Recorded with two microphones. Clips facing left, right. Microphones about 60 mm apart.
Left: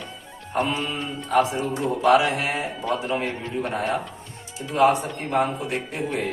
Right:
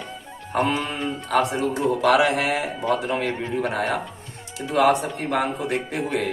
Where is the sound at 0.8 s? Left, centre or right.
Right.